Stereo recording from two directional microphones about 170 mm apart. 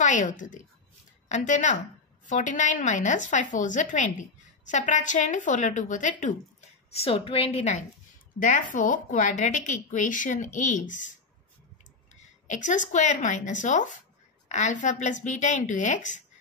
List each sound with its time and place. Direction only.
0.0 s a woman's voice: 45° left (ahead or behind)
6.9 s a woman's voice: 35° left (ahead or behind)
12.2 s a woman's voice: 45° left (ahead or behind)